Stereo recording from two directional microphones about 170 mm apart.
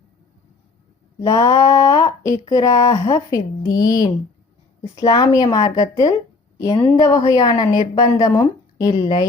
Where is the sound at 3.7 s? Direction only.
55° left (ahead or behind).